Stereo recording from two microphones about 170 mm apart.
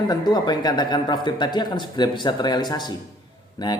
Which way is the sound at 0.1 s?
25° left (ahead or behind).